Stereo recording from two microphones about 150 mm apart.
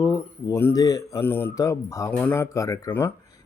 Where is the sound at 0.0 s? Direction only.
20° left (ahead or behind).